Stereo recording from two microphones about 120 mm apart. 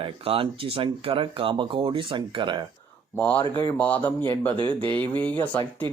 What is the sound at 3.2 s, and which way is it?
Speech, 15° left (ahead or behind).